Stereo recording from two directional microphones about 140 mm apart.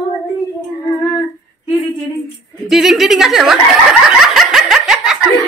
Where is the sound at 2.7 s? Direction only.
Centre (ahead or behind).